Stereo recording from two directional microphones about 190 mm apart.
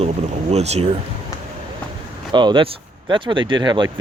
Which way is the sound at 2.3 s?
25° right (ahead or behind).